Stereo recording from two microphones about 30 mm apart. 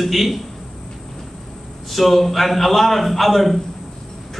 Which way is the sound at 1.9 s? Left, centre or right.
Centre.